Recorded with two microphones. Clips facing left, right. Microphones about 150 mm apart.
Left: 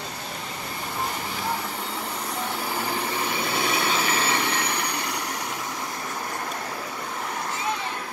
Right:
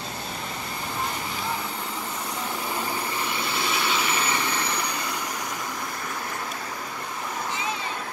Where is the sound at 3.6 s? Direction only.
45° left (ahead or behind).